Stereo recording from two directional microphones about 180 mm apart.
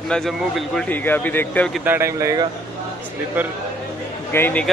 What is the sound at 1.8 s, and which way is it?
Speech, 15° right (ahead or behind).